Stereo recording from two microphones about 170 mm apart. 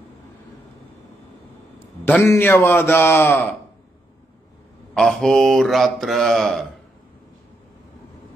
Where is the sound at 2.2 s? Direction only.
15° left (ahead or behind).